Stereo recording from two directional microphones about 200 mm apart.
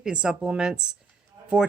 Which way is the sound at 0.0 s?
5° right (ahead or behind).